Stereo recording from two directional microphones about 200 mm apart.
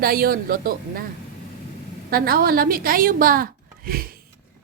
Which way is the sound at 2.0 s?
50° right (ahead or behind).